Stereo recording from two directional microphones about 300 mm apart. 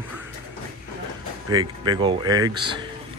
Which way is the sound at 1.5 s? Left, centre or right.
Centre.